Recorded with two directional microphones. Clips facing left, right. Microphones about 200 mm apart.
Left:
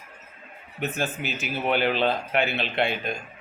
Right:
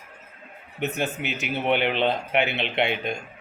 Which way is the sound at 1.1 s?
70° right (ahead or behind).